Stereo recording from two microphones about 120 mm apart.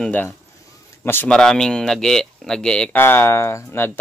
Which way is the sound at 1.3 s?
5° left (ahead or behind).